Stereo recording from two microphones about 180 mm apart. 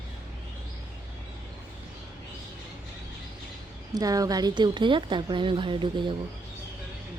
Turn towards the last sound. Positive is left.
turn(degrees=-25)  # may be behind; listen again after turning